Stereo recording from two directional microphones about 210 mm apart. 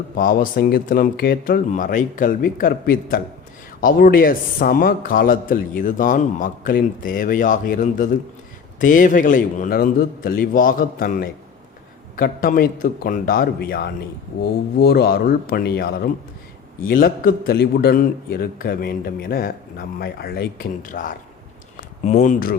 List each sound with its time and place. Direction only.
0.2 s speech: 40° left (ahead or behind)